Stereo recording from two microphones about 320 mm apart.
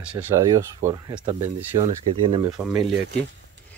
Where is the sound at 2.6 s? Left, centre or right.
Centre.